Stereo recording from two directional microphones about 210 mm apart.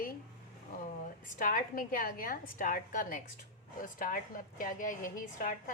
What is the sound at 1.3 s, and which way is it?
A woman's voice, 40° left (ahead or behind).